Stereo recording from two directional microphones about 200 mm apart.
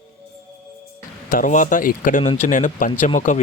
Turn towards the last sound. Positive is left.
turn(degrees=40)  # may be behind; listen again after turning